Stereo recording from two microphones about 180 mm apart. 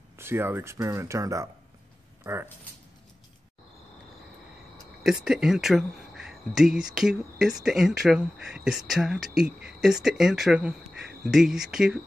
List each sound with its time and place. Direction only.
0.2 s speech: 15° right (ahead or behind)
5.0 s speech: 5° right (ahead or behind)